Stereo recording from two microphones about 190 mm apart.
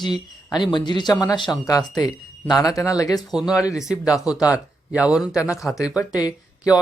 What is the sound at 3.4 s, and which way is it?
Speech, 5° right (ahead or behind).